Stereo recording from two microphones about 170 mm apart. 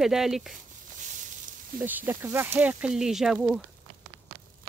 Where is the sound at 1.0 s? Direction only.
50° right (ahead or behind).